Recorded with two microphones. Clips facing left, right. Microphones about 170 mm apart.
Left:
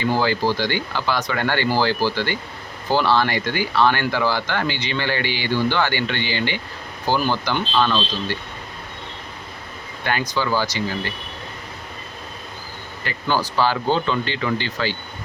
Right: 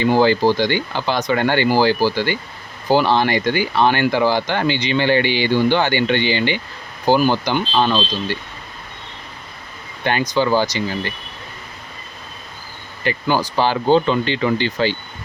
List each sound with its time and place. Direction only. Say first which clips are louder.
0.0 s speech: right 6 dB; 25° right (ahead or behind)
10.0 s speech: right 5 dB; 20° right (ahead or behind)
13.1 s speech: right 4 dB; 15° right (ahead or behind)